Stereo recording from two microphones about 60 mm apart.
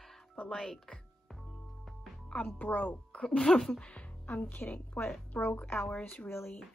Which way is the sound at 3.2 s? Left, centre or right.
Centre.